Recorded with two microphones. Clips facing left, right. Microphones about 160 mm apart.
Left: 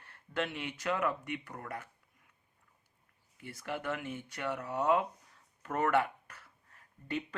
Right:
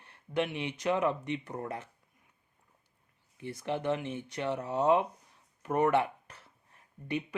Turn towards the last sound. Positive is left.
turn(degrees=-15)  # may be behind; listen again after turning